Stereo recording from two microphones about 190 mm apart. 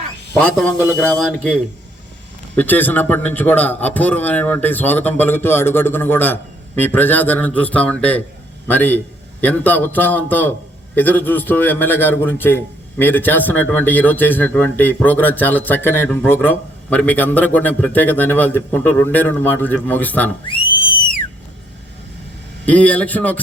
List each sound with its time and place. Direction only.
0.3 s speech: 5° left (ahead or behind)
2.6 s a man's voice: 10° left (ahead or behind)
20.5 s whistle: 25° left (ahead or behind)
22.6 s a man's voice: 5° left (ahead or behind)